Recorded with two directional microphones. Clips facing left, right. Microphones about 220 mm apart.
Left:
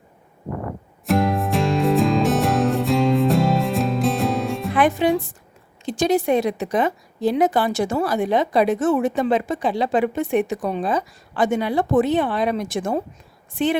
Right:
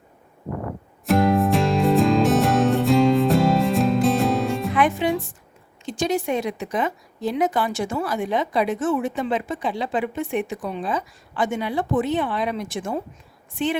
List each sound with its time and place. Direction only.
1.0 s music: centre (ahead or behind)
4.7 s music: 35° left (ahead or behind)
5.8 s a woman's voice: 35° left (ahead or behind)